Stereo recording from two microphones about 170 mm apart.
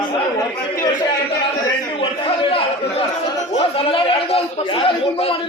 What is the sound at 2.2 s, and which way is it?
A man's voice, 30° left (ahead or behind).